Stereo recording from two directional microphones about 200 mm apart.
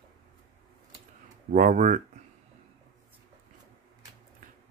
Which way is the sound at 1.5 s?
40° right (ahead or behind).